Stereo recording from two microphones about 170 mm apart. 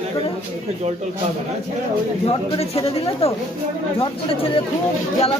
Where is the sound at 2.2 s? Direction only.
35° left (ahead or behind).